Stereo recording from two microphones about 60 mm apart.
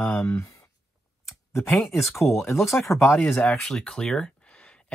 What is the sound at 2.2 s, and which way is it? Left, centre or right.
Speech, left.